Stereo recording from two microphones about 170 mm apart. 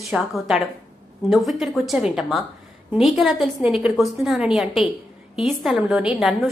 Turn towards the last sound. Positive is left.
turn(degrees=-5)  # may be behind; listen again after turning